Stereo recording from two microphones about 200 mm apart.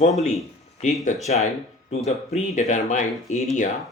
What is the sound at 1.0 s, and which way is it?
Speech, 35° left (ahead or behind).